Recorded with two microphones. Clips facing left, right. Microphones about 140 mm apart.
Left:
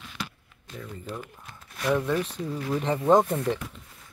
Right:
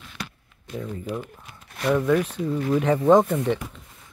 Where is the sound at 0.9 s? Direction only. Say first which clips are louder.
Right 5 dB; 10° right (ahead or behind).